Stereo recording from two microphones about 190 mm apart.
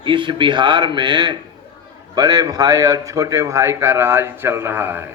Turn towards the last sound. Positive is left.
turn(degrees=-10)  # may be behind; listen again after turning